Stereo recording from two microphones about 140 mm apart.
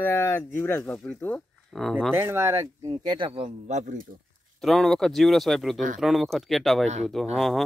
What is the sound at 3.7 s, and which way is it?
Speech, 55° right (ahead or behind).